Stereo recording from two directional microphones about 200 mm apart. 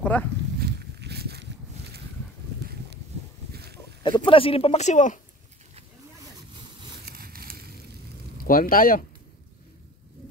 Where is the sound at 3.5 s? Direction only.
55° right (ahead or behind).